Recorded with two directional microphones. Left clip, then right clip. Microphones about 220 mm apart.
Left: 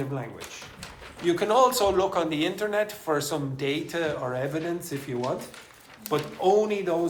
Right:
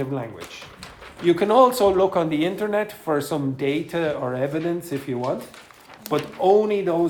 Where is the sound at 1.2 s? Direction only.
35° right (ahead or behind).